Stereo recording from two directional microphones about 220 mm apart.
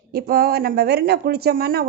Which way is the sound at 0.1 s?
45° right (ahead or behind).